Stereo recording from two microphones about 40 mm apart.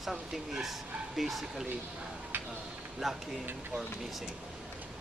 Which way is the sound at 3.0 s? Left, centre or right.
Centre.